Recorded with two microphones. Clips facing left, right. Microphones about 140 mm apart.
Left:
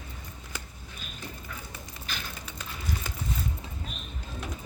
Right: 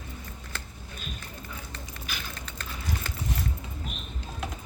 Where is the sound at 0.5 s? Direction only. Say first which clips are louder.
Even; 10° left (ahead or behind).